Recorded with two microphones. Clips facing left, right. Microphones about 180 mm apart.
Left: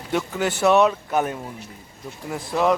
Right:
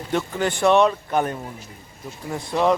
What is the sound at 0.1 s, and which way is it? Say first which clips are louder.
Speech: even; 5° left (ahead or behind).